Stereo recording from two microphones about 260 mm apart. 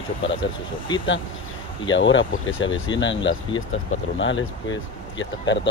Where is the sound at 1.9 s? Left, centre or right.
Left.